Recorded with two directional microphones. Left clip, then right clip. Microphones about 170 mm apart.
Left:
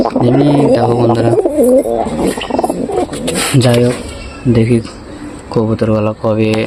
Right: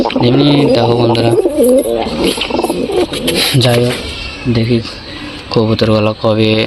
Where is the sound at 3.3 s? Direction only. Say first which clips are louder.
Even; 35° left (ahead or behind).